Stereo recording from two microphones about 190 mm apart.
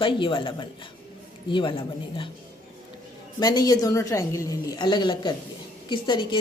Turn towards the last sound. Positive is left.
turn(degrees=25)  # may be behind; listen again after turning